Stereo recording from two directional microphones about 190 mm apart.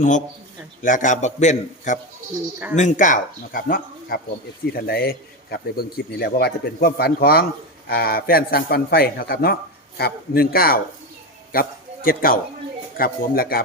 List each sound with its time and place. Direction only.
0.8 s a man's voice: 45° left (ahead or behind)